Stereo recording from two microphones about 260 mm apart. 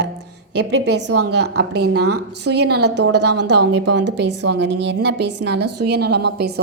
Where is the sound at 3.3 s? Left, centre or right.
Right.